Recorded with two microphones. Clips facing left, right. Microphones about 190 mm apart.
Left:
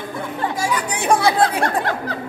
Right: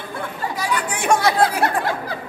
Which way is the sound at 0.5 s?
35° left (ahead or behind).